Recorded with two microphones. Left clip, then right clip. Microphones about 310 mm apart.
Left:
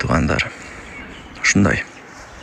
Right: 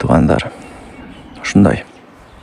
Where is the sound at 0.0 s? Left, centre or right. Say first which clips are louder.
Right 5 dB; centre.